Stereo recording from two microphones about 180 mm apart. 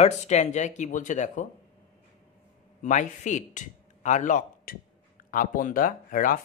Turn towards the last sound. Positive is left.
turn(degrees=50)  # may be behind; listen again after turning